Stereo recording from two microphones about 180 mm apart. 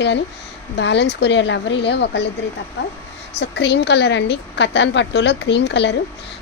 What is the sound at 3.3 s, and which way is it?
Speech, 70° left (ahead or behind).